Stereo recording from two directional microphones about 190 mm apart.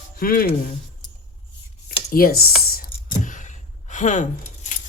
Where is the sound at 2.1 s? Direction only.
50° left (ahead or behind).